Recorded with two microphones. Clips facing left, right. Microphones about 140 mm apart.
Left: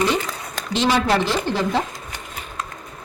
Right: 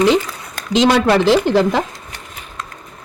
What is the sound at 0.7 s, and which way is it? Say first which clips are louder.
A woman's voice: right 6 dB; 80° right.